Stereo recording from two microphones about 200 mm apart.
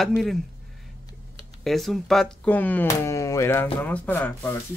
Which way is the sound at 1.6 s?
Centre (ahead or behind).